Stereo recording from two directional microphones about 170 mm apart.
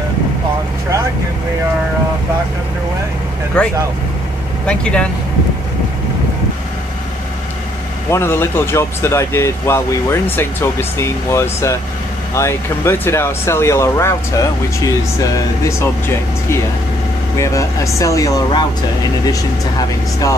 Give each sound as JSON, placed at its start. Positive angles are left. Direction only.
{"t": 3.6, "sound": "speech", "side_deg": 5}
{"t": 8.1, "sound": "speech", "side_deg": 15}
{"t": 19.8, "sound": "speech", "side_deg": 20}